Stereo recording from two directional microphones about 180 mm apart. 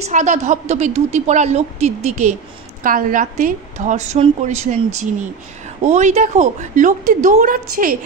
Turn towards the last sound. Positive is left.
turn(degrees=-50)  # may be behind; listen again after turning